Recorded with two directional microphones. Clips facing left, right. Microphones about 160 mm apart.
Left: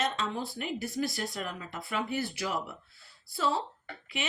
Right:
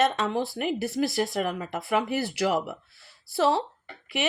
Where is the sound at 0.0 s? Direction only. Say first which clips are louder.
Right 8 dB; 70° right (ahead or behind).